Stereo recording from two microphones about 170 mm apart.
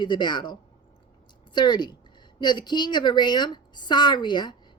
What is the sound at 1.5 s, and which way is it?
A woman's voice, 25° left (ahead or behind).